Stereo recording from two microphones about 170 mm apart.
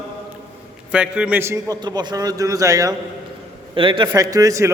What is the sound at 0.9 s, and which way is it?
A man's voice, 5° right (ahead or behind).